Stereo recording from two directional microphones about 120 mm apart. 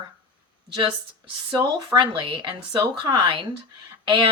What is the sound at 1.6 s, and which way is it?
Speech, 35° right (ahead or behind).